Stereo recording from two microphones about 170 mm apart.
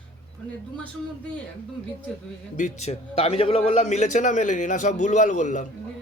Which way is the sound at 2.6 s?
40° left (ahead or behind).